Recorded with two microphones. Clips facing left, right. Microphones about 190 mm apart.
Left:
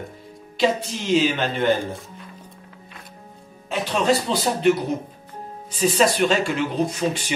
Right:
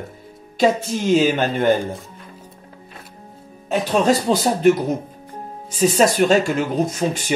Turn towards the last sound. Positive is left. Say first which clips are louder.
# right 2 dB
turn(degrees=-45)  # may be behind; listen again after turning